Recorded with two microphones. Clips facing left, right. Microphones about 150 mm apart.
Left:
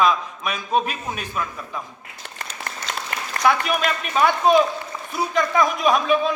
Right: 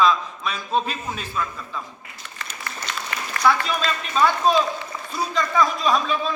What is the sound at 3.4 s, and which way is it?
A man's voice, 15° left (ahead or behind).